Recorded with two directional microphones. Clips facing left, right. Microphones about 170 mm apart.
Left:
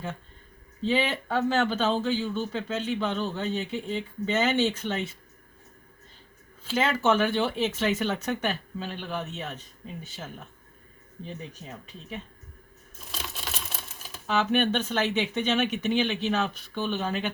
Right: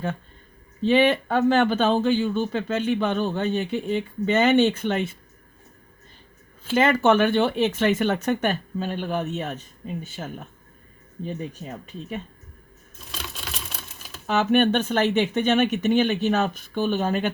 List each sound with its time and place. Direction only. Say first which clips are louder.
0.9 s speech: right 7 dB; 60° right (ahead or behind)
6.7 s speech: right 6 dB; 55° right (ahead or behind)
13.4 s a sound: right 1 dB; centre (ahead or behind)
14.3 s speech: right 5 dB; 50° right (ahead or behind)